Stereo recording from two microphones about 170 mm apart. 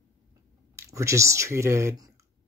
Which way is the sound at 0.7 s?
15° right (ahead or behind).